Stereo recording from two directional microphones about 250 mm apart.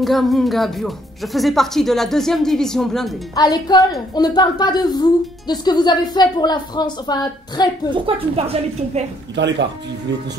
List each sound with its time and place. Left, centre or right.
0.0 s speech: centre
3.3 s a woman's voice: centre
8.1 s a woman's voice: right
9.4 s speech: right